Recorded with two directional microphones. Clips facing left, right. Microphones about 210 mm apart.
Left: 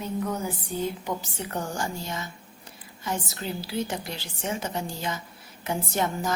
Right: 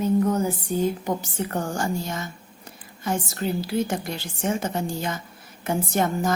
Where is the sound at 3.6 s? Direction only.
50° right (ahead or behind).